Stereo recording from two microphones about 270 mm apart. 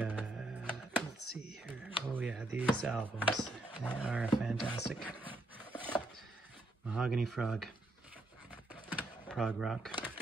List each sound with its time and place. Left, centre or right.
0.0 s music: centre
1.2 s a sound: left
1.7 s a sound: centre
2.8 s speech: centre
5.7 s wood: centre
6.9 s speech: centre
9.3 s speech: centre